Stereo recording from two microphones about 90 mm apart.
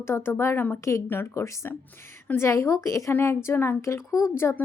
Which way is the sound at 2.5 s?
35° left (ahead or behind).